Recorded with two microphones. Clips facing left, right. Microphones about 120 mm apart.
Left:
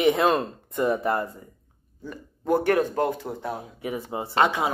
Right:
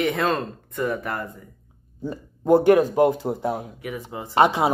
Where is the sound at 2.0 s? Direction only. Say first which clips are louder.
Right 6 dB; 20° right (ahead or behind).